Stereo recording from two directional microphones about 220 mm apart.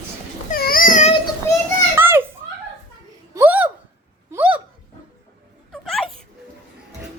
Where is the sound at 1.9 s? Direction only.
10° right (ahead or behind).